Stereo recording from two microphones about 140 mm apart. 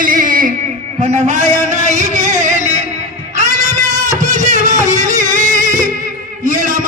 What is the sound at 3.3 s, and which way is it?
Music, 60° right (ahead or behind).